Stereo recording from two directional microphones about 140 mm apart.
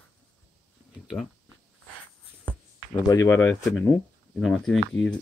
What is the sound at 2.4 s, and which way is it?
Speech, 20° left (ahead or behind).